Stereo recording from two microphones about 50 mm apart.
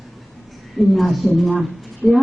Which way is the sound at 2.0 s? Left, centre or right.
Left.